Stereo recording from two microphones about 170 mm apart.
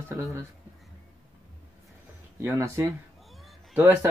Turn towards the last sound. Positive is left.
turn(degrees=-15)  # may be behind; listen again after turning